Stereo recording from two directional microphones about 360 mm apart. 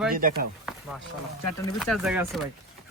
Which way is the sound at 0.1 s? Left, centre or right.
Right.